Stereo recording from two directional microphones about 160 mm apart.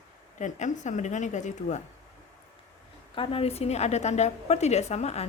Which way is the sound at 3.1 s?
35° left (ahead or behind).